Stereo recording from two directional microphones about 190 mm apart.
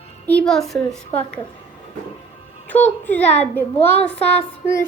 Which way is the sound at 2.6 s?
10° left (ahead or behind).